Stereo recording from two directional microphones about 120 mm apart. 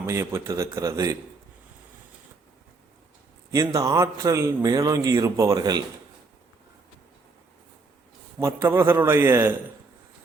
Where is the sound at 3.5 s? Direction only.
30° right (ahead or behind).